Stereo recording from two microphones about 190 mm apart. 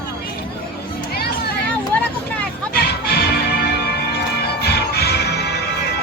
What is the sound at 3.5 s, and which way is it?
Music, 55° left (ahead or behind).